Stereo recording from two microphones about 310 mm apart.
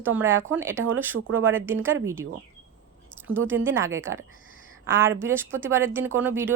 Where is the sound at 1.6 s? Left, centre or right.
Centre.